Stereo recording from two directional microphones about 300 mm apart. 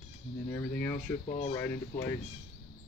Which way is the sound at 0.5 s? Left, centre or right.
Centre.